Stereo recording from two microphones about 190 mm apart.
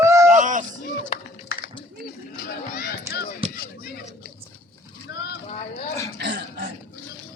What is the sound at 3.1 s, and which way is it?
Chop, 55° left (ahead or behind).